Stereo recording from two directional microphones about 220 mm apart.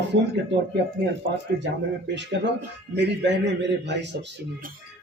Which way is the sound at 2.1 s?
55° right (ahead or behind).